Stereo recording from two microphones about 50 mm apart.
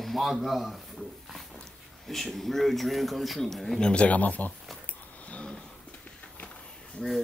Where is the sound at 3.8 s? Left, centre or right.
Centre.